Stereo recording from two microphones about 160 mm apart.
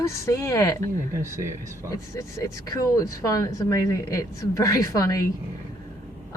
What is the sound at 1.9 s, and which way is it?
Speech, 20° left (ahead or behind).